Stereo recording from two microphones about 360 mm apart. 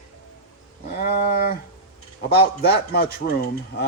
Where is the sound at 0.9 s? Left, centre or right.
Left.